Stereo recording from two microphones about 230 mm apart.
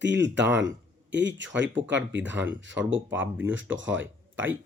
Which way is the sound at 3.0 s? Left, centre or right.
Centre.